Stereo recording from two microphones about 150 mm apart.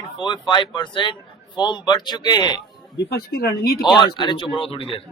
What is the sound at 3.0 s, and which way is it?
Speech, 90° left.